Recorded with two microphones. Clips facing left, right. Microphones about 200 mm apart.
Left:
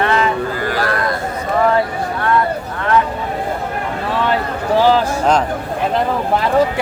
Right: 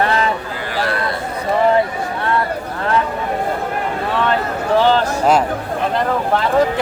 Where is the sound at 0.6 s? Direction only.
45° left (ahead or behind).